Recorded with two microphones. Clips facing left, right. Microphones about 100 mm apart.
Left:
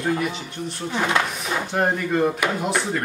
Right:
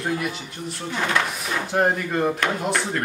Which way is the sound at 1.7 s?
Centre (ahead or behind).